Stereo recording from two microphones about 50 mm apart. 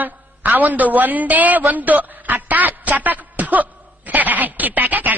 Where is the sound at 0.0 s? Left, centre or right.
Right.